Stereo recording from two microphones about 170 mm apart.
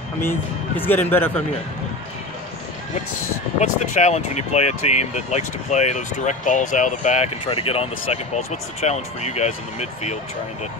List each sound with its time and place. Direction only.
0.2 s speech: 10° left (ahead or behind)
3.5 s speech: 40° left (ahead or behind)